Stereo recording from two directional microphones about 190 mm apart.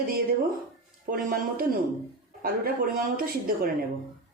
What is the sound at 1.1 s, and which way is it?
A man's voice, 50° right (ahead or behind).